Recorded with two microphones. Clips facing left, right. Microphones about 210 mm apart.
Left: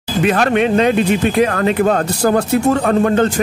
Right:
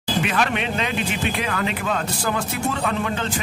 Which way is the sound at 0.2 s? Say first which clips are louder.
Left 11 dB; 45° left (ahead or behind).